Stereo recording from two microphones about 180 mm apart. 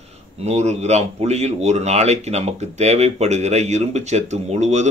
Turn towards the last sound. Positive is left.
turn(degrees=-40)  # may be behind; listen again after turning